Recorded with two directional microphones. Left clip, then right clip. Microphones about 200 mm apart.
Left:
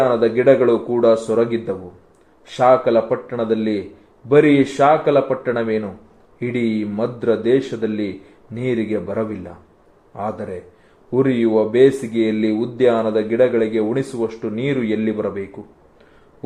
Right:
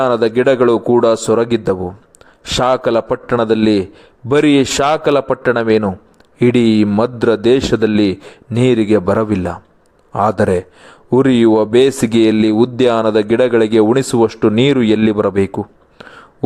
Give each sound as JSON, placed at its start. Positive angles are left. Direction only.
{"t": 0.0, "sound": "speech", "side_deg": -50}